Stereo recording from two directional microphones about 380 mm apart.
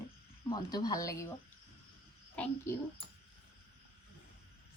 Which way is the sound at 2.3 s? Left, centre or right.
Centre.